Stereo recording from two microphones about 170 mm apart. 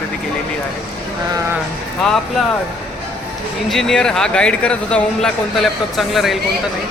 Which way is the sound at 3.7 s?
Centre (ahead or behind).